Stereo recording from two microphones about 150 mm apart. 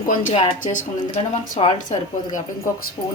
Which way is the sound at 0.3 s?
55° left (ahead or behind).